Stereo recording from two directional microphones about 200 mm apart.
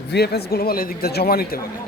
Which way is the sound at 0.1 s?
55° left (ahead or behind).